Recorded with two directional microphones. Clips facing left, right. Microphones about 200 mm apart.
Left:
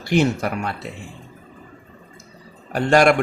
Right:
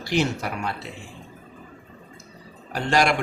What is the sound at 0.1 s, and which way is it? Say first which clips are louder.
Speech: left 5 dB; 55° left (ahead or behind).